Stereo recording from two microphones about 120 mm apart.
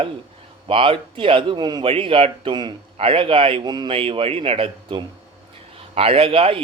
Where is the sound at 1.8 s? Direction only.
50° right (ahead or behind).